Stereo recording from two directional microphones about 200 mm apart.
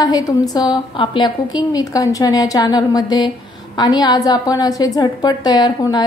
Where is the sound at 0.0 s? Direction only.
20° left (ahead or behind).